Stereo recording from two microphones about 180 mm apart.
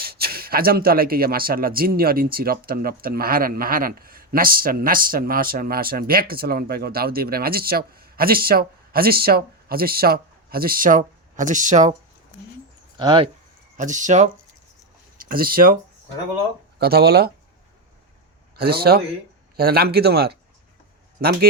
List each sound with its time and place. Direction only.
0.0 s speech: 60° right (ahead or behind); by 11.9 s 45° right (ahead or behind)
13.0 s speech: 25° right (ahead or behind)
13.7 s speech: 45° right (ahead or behind)
15.2 s speech: 50° right (ahead or behind)
18.5 s speech: 60° right (ahead or behind)